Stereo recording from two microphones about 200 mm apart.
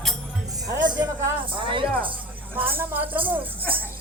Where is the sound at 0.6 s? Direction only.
15° right (ahead or behind).